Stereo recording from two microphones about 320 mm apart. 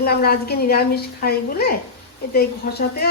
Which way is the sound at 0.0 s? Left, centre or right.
Left.